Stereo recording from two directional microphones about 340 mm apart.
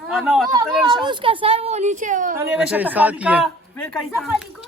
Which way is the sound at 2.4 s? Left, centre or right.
Centre.